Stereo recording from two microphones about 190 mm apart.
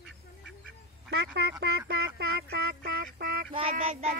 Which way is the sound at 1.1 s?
60° right (ahead or behind).